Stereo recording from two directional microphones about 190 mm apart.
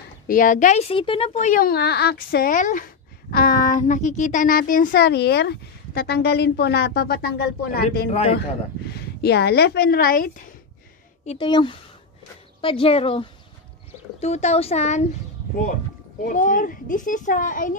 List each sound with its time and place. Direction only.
0.3 s speech: 45° left (ahead or behind)
8.1 s speech: 35° left (ahead or behind)
8.4 s speech: 60° left (ahead or behind)
11.2 s speech: 25° left (ahead or behind)
16.3 s speech: 45° left (ahead or behind)